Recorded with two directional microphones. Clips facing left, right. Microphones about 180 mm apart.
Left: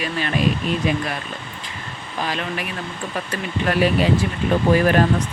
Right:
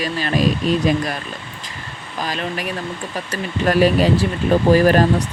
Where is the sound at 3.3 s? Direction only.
40° right (ahead or behind).